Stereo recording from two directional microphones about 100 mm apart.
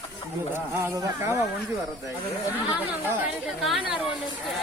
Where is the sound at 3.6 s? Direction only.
Centre (ahead or behind).